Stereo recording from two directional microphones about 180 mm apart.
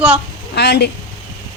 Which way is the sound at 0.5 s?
65° left (ahead or behind).